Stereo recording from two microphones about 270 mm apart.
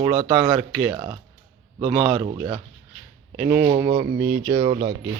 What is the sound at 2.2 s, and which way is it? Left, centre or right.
Speech, centre.